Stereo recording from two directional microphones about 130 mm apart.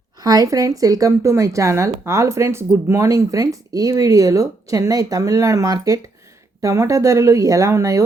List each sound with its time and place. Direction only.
0.2 s a woman's voice: 30° right (ahead or behind)